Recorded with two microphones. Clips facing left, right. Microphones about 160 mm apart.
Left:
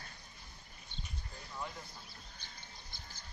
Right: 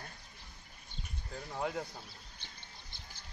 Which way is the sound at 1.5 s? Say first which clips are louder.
Right 8 dB; 75° right (ahead or behind).